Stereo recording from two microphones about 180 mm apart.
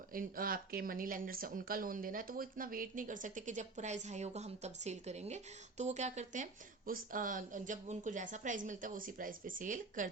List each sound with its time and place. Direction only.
0.1 s speech: 50° right (ahead or behind)